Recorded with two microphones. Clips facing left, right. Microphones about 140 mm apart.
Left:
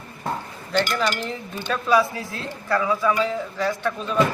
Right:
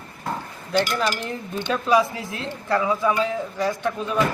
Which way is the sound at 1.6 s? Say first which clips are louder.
Even; 20° right (ahead or behind).